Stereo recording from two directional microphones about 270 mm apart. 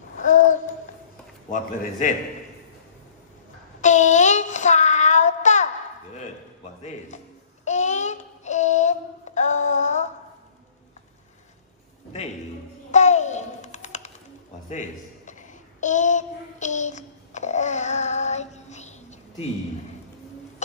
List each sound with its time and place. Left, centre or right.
0.2 s a sound: left
1.5 s a man's voice: left
3.8 s child singing: left
6.8 s music: left
7.6 s child singing: left
12.9 s a sound: left